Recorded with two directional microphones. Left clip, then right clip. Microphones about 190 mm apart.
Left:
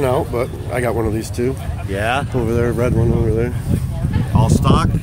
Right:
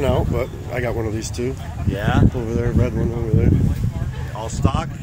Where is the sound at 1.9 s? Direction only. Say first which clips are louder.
Left 4 dB; 40° left (ahead or behind).